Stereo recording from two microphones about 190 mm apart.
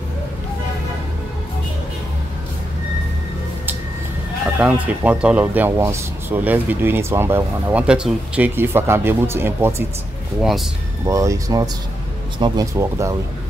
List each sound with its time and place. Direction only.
4.6 s speech: 10° right (ahead or behind)
11.1 s speech: 15° right (ahead or behind)